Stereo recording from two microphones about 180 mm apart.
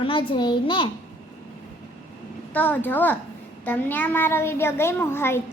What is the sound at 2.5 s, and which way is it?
A child's voice, 10° left (ahead or behind).